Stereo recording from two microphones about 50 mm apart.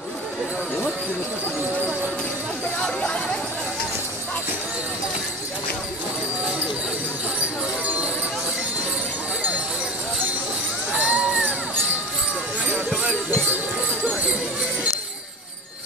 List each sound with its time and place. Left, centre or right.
7.8 s clip-clop: right
10.9 s music: right
12.7 s music: centre